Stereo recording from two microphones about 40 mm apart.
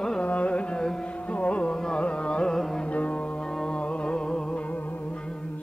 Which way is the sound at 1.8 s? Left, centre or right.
Left.